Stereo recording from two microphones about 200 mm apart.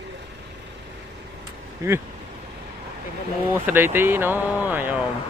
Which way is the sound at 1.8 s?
15° right (ahead or behind).